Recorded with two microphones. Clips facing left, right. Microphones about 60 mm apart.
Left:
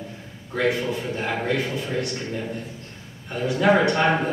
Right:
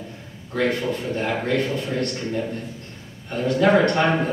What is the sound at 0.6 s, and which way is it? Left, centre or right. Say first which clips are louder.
A man's voice: right 1 dB; centre.